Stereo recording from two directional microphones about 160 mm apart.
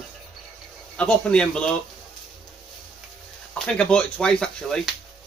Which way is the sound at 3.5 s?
5° left (ahead or behind).